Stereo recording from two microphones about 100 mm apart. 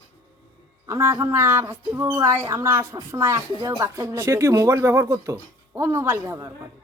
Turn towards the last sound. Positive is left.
turn(degrees=-30)  # may be behind; listen again after turning